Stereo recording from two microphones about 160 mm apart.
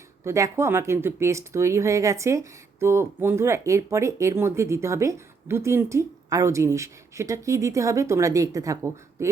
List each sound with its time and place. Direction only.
0.3 s speech: 20° right (ahead or behind)